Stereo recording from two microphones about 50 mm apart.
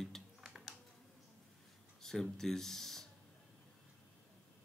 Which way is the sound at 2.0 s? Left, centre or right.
Centre.